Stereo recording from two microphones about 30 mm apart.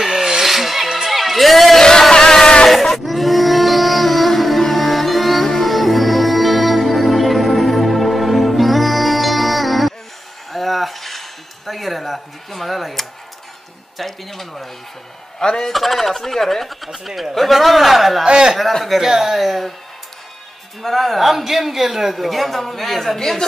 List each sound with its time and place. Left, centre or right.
0.0 s music: centre
0.5 s music: centre
1.8 s a sound: centre
2.7 s a sound: centre
13.9 s speech: centre
15.3 s a man's voice: left
15.7 s speech: centre
16.9 s speech: centre
18.2 s speech: right
18.7 s speech: centre
18.9 s speech: centre
20.8 s speech: centre